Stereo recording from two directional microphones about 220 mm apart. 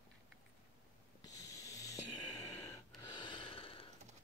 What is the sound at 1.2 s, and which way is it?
Snoring, 15° left (ahead or behind).